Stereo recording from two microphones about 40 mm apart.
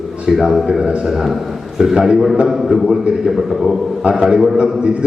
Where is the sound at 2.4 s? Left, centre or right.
Centre.